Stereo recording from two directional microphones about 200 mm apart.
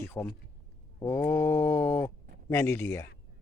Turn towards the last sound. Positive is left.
turn(degrees=10)  # may be behind; listen again after turning